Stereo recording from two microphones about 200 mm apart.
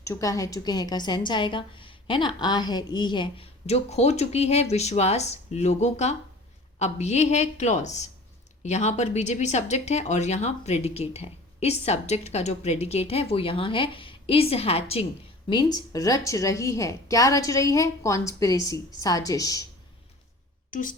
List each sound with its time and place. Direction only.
0.0 s a woman's voice: 15° left (ahead or behind)
20.7 s a woman's voice: 40° left (ahead or behind)